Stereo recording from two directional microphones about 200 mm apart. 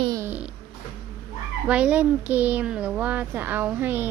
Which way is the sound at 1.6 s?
5° right (ahead or behind).